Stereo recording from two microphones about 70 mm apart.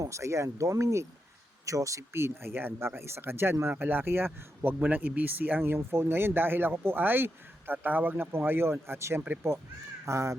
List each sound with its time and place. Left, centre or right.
0.0 s speech: right
2.1 s speech: right
4.7 s speech: right